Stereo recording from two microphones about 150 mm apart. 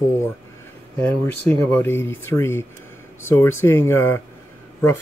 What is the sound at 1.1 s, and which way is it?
Speech, 10° left (ahead or behind).